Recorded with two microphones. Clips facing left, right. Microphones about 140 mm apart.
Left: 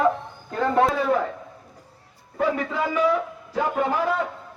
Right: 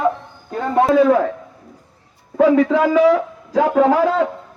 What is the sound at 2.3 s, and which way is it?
A man's voice, 90° right.